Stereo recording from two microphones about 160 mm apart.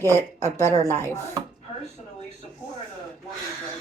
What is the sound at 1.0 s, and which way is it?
Speech, 20° right (ahead or behind).